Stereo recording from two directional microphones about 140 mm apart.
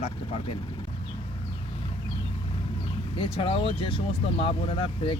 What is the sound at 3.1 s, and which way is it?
Speech, 40° left (ahead or behind).